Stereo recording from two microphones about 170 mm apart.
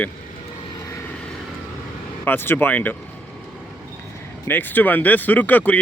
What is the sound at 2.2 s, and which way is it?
Speech, 10° left (ahead or behind).